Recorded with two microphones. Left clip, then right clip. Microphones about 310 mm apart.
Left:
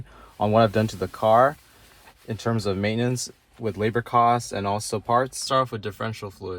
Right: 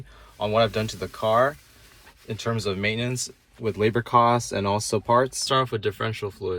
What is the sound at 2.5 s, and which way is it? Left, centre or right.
Speech, left.